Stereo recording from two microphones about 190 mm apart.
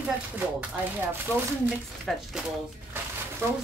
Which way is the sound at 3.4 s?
15° right (ahead or behind).